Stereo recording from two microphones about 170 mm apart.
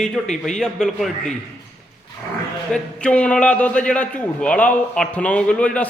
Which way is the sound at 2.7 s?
5° left (ahead or behind).